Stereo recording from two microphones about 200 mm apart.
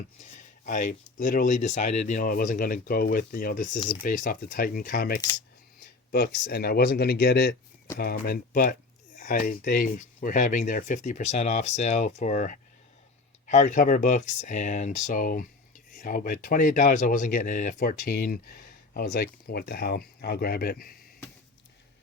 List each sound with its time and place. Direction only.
0.2 s speech: 35° left (ahead or behind)